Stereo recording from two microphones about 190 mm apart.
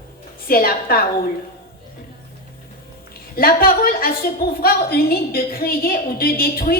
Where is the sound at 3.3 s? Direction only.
50° left (ahead or behind).